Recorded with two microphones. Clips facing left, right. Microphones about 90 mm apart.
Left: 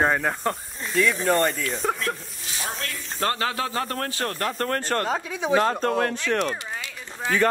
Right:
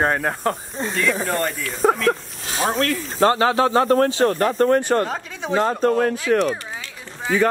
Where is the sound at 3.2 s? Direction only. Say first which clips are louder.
Right 9 dB; 25° right (ahead or behind).